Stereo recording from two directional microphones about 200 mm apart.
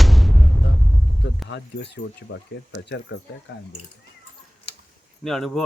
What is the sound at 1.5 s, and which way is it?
Speech, 60° left (ahead or behind).